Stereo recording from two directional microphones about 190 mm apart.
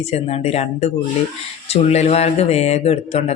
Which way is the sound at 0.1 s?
35° left (ahead or behind).